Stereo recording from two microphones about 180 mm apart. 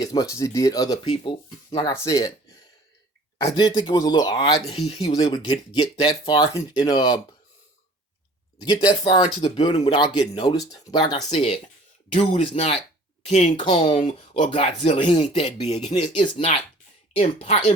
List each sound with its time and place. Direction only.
0.0 s speech: 20° left (ahead or behind)
3.4 s speech: 20° left (ahead or behind)
4.7 s speech: 35° left (ahead or behind)
8.6 s speech: 25° left (ahead or behind)
17.2 s speech: 35° left (ahead or behind)